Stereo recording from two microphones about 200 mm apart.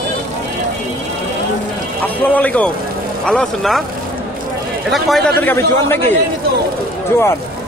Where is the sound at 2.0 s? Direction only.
10° left (ahead or behind).